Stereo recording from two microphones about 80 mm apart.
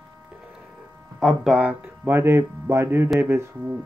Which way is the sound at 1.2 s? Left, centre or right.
Centre.